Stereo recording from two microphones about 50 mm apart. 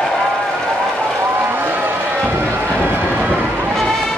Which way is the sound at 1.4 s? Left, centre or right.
Right.